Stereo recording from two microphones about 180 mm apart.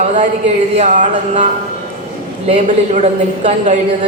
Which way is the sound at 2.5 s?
40° right (ahead or behind).